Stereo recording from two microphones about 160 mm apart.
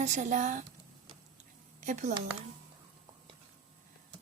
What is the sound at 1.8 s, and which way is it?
Speech, 50° right (ahead or behind).